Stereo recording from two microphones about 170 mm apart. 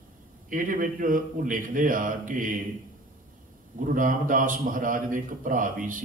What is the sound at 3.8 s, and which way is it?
A man's voice, 50° right (ahead or behind).